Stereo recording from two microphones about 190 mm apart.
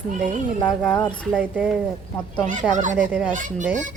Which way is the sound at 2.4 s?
40° right (ahead or behind).